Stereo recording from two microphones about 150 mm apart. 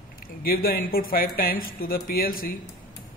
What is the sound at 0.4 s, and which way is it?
A man's voice, 85° left.